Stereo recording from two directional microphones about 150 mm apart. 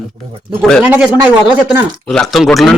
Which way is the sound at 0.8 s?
10° right (ahead or behind).